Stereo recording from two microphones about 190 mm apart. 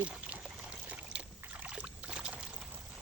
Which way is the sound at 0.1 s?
5° right (ahead or behind).